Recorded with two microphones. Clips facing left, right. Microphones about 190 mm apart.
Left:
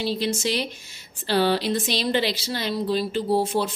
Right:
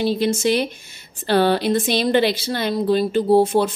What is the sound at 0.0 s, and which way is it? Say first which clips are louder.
Speech: right 6 dB; 50° right (ahead or behind).